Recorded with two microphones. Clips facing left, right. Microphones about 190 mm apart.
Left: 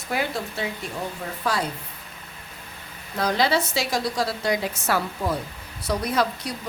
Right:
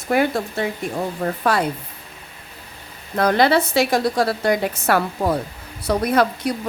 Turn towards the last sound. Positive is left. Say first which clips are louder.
# right 6 dB
turn(degrees=-55)  # may be behind; listen again after turning